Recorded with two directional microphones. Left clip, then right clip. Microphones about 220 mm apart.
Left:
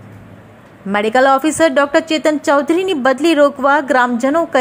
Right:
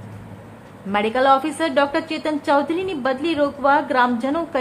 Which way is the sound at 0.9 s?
20° left (ahead or behind).